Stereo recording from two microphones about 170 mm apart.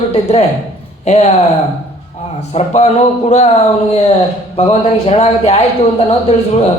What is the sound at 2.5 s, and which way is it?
A man's voice, 40° left (ahead or behind).